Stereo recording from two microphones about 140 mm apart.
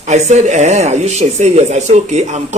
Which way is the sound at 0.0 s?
55° right (ahead or behind).